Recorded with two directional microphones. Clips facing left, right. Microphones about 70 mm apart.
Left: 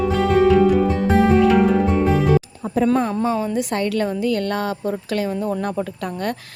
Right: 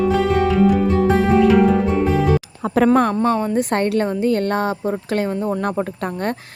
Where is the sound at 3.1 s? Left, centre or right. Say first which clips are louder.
Right 3 dB; centre.